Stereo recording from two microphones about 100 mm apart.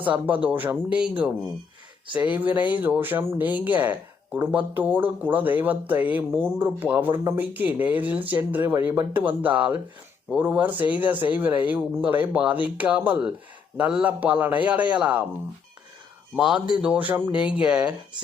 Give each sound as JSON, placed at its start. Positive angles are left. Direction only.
{"t": 0.0, "sound": "speech", "side_deg": -15}
{"t": 16.3, "sound": "speech", "side_deg": -5}